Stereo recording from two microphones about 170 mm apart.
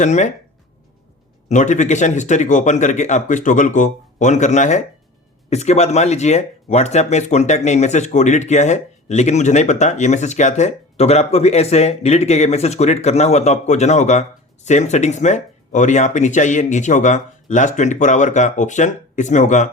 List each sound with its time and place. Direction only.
0.0 s speech: 45° left (ahead or behind)
1.5 s speech: 45° left (ahead or behind)